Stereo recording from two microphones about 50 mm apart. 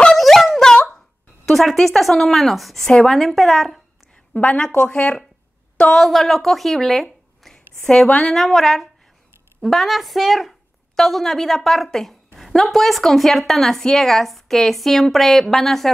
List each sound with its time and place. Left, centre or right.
0.1 s dog: centre
1.4 s a woman's voice: centre
4.3 s speech: left
5.9 s speech: centre
7.8 s a woman's voice: centre
8.3 s a woman's voice: centre